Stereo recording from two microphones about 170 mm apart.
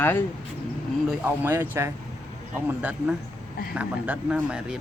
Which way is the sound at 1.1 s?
10° right (ahead or behind).